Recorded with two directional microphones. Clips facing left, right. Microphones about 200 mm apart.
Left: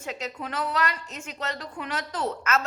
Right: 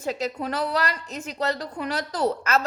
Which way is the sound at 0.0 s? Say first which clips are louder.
Right 6 dB; 35° right (ahead or behind).